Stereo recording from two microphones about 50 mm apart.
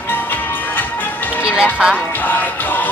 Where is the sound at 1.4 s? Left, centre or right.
Right.